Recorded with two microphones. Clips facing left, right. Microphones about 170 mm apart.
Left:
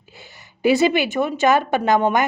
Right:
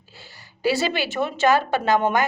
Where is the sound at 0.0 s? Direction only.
20° left (ahead or behind).